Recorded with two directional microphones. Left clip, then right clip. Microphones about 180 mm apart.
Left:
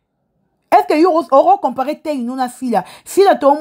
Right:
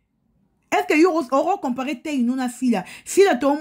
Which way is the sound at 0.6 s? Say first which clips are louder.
Left 7 dB; 20° left (ahead or behind).